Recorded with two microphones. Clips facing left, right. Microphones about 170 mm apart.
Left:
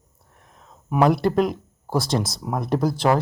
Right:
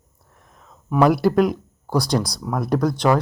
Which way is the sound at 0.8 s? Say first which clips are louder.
Right 2 dB; 15° left (ahead or behind).